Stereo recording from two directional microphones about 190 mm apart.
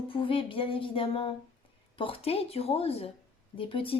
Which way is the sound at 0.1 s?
25° left (ahead or behind).